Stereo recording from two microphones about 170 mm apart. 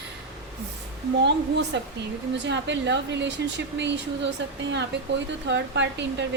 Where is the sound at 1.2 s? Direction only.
90° right.